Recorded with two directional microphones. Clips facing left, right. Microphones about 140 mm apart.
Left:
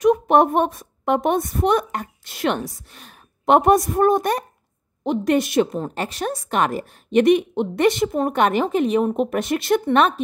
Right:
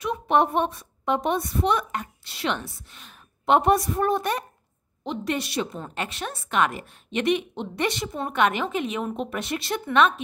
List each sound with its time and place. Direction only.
0.0 s a woman's voice: 45° left (ahead or behind)
5.8 s a woman's voice: 35° left (ahead or behind)
9.8 s a woman's voice: 40° left (ahead or behind)